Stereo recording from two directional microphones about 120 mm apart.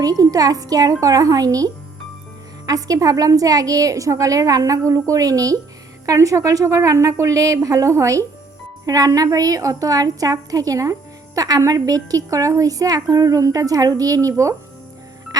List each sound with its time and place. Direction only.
0.0 s a woman's voice: 30° right (ahead or behind)